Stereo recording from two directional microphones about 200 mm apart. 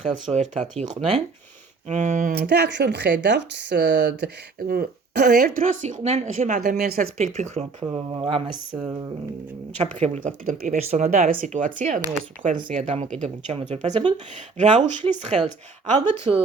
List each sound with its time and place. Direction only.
0.3 s speech: 35° right (ahead or behind)
1.9 s speech: 40° right (ahead or behind)
7.3 s speech: 30° right (ahead or behind)
8.7 s speech: 10° right (ahead or behind)
9.8 s speech: 35° right (ahead or behind)